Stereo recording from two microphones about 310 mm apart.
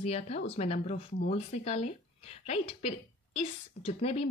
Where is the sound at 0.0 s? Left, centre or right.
Centre.